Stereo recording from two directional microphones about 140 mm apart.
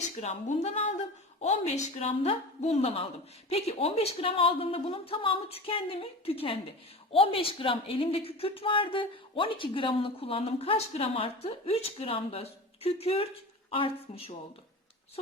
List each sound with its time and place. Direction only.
0.2 s a woman's voice: 50° left (ahead or behind)